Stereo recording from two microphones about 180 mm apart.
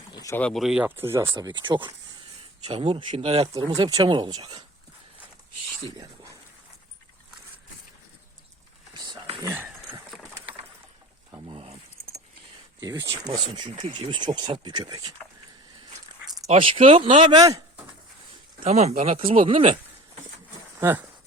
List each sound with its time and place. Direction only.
0.1 s a sound: 20° left (ahead or behind)
0.3 s speech: 5° left (ahead or behind); by 1.3 s 15° right (ahead or behind)
1.3 s speech: 25° right (ahead or behind)
3.8 s speech: 20° right (ahead or behind)
8.9 s a sound: 25° right (ahead or behind)
9.4 s a sound: 15° right (ahead or behind)
11.3 s boat: 25° right (ahead or behind)
12.8 s speech: 20° right (ahead or behind)
16.2 s dog: centre (ahead or behind)
16.5 s speech: 30° right (ahead or behind)
18.6 s speech: 35° right (ahead or behind)
20.7 s speech: 10° right (ahead or behind)